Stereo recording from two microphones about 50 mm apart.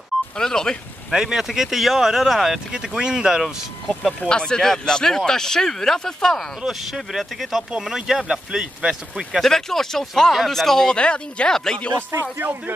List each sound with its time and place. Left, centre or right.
0.4 s speech: centre
1.1 s speech: centre
2.7 s speech: centre
4.2 s speech: centre
6.6 s speech: centre
9.4 s speech: centre
11.0 s speech: left
12.2 s speech: right